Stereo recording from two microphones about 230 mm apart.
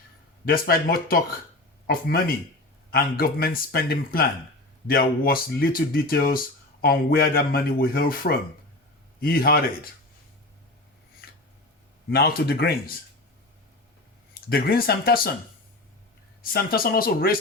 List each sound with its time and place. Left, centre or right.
0.4 s speech: left
12.1 s speech: left
14.5 s speech: left
16.4 s speech: left